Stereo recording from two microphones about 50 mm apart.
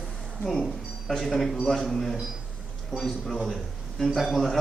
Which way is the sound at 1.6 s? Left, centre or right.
Centre.